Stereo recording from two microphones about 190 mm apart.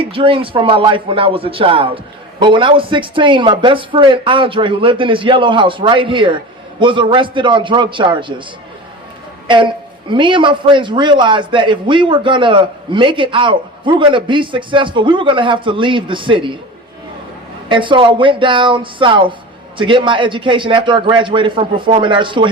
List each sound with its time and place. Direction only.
0.0 s a man's voice: 30° right (ahead or behind)
9.5 s a man's voice: 25° right (ahead or behind)
17.7 s a man's voice: 25° right (ahead or behind)